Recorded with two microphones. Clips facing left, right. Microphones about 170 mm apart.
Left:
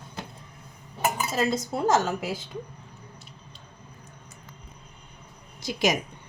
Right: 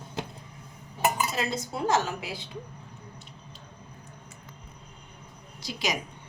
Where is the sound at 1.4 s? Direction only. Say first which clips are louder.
Left 5 dB; 50° left (ahead or behind).